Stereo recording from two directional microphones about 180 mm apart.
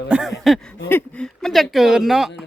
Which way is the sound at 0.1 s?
Centre (ahead or behind).